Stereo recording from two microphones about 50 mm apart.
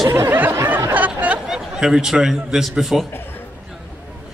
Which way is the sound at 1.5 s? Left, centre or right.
Centre.